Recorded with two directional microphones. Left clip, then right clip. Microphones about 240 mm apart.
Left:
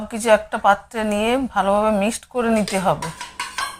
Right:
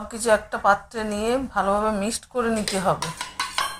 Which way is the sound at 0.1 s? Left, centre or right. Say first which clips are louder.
Left 4 dB; left.